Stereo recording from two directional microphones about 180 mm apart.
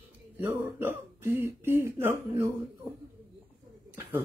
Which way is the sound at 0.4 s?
10° right (ahead or behind).